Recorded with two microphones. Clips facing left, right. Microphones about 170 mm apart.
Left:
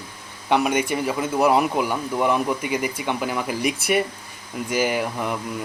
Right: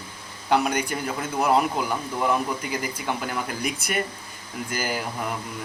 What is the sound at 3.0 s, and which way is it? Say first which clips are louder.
Speech: left 4 dB; 5° left (ahead or behind).